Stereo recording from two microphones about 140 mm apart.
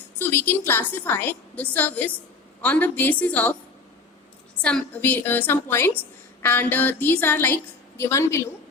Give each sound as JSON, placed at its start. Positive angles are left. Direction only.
{"t": 0.2, "sound": "a woman's voice", "side_deg": 15}
{"t": 4.6, "sound": "a woman's voice", "side_deg": 10}